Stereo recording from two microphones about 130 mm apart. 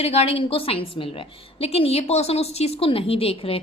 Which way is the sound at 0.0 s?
50° left (ahead or behind).